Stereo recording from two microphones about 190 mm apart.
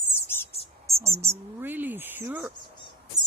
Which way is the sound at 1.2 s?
15° right (ahead or behind).